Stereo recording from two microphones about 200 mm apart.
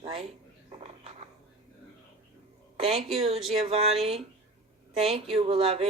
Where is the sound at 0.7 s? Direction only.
30° right (ahead or behind).